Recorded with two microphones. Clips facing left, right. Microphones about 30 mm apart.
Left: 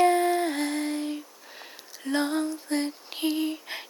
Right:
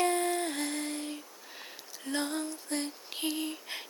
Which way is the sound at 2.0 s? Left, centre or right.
Left.